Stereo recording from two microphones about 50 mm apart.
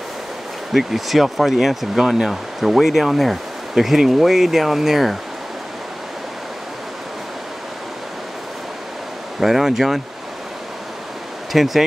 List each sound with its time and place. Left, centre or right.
0.7 s speech: centre
9.4 s speech: centre
11.5 s speech: centre